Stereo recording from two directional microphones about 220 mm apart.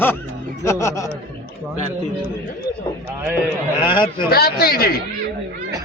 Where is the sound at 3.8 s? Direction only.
20° left (ahead or behind).